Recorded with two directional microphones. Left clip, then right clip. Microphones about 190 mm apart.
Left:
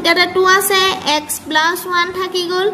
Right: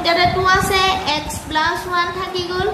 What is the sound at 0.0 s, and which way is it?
Female singing, 55° left (ahead or behind).